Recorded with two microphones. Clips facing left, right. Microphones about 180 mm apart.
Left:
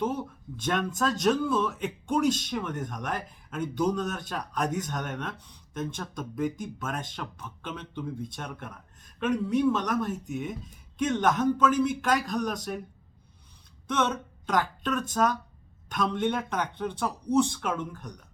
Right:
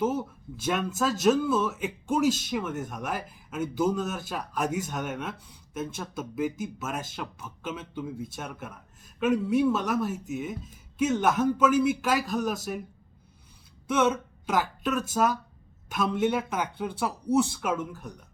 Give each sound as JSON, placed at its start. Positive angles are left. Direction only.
{"t": 0.0, "sound": "speech", "side_deg": -5}
{"t": 13.8, "sound": "speech", "side_deg": -10}